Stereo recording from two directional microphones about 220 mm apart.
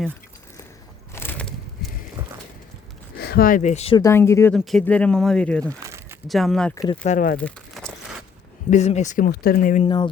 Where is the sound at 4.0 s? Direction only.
10° left (ahead or behind).